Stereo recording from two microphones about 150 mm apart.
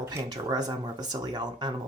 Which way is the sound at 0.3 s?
30° right (ahead or behind).